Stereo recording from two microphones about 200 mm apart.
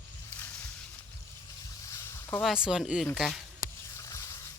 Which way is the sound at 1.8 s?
15° left (ahead or behind).